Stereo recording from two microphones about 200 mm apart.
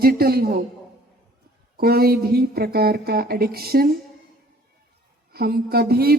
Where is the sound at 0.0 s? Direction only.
50° right (ahead or behind).